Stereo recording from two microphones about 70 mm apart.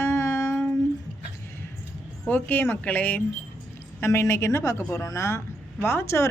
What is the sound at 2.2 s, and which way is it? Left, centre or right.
Speech, left.